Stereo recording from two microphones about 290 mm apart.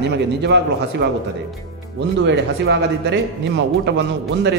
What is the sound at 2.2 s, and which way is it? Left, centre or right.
Speech, right.